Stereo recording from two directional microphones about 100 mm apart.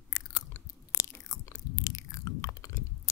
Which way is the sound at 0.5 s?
25° left (ahead or behind).